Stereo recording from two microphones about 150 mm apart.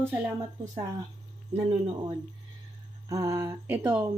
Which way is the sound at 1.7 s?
35° right (ahead or behind).